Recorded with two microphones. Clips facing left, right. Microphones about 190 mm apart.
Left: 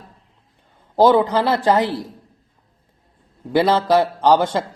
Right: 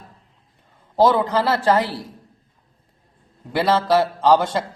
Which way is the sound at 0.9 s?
15° left (ahead or behind).